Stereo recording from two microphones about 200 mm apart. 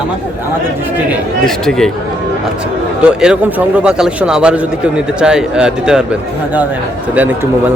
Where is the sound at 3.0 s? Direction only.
5° right (ahead or behind).